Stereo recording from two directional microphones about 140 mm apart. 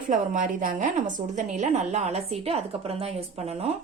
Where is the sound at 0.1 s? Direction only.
70° right (ahead or behind).